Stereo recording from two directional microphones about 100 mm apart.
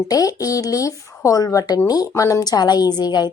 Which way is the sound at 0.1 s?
35° left (ahead or behind).